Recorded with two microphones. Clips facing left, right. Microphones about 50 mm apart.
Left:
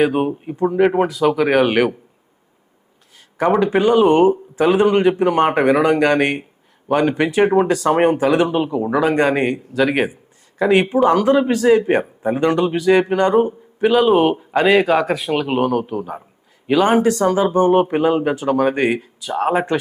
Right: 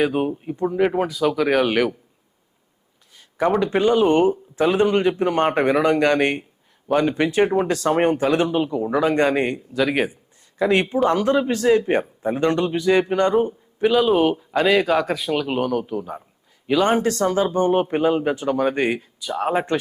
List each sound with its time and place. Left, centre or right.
0.0 s speech: centre
3.3 s a man's voice: centre
15.3 s speech: centre